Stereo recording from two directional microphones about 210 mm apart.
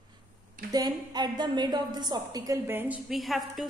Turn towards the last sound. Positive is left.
turn(degrees=0)  # may be behind; listen again after turning